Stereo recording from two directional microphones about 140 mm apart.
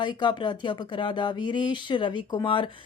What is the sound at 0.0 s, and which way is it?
Speech, 35° left (ahead or behind).